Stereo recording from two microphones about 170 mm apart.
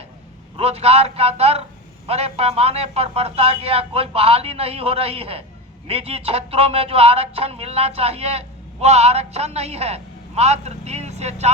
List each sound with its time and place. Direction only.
0.5 s speech: 35° right (ahead or behind)